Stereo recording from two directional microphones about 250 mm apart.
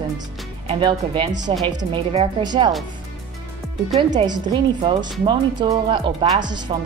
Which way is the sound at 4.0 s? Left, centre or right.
Right.